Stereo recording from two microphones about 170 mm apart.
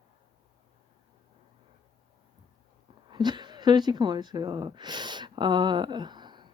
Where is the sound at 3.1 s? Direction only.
25° right (ahead or behind).